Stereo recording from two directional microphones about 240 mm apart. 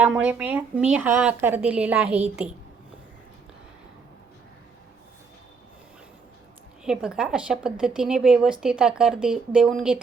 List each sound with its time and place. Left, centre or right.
0.3 s a woman's voice: centre
6.8 s a woman's voice: centre